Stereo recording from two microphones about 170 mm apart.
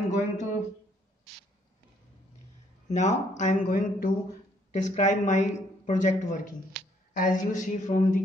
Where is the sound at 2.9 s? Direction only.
45° left (ahead or behind).